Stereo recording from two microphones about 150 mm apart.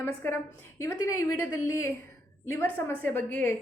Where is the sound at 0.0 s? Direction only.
15° left (ahead or behind).